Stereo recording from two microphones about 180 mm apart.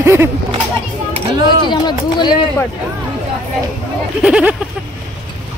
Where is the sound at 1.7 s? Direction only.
25° left (ahead or behind).